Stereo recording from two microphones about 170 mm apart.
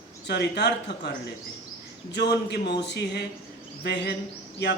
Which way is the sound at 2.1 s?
85° left.